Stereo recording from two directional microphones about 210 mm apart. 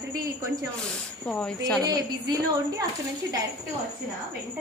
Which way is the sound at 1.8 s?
20° right (ahead or behind).